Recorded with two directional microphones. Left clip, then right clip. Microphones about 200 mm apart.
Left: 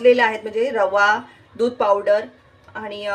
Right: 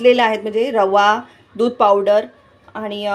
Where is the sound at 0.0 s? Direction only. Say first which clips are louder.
Right 2 dB; 40° right (ahead or behind).